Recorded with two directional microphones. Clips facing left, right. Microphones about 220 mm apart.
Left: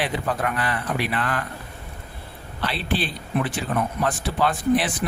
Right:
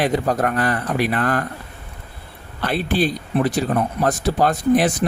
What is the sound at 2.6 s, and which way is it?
Speech, 50° right (ahead or behind).